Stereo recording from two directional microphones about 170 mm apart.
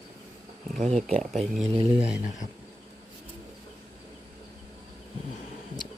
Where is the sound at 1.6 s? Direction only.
35° right (ahead or behind).